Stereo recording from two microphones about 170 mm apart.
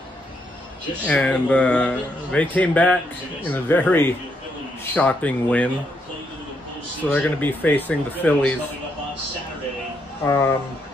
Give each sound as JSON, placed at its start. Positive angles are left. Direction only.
{"t": 1.0, "sound": "speech", "side_deg": 5}
{"t": 7.0, "sound": "speech", "side_deg": 10}
{"t": 10.2, "sound": "speech", "side_deg": 15}